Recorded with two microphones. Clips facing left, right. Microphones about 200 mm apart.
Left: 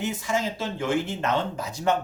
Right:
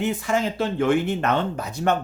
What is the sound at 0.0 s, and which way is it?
Speech, 60° right (ahead or behind).